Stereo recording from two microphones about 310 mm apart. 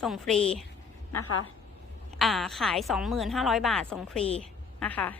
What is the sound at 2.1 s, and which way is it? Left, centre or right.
A woman's voice, centre.